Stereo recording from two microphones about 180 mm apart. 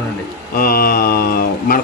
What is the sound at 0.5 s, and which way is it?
Mantra, 55° left (ahead or behind).